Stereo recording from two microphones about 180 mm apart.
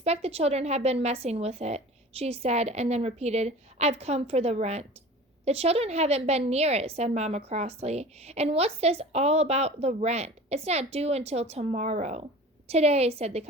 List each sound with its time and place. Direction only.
0.0 s a woman's voice: 35° right (ahead or behind)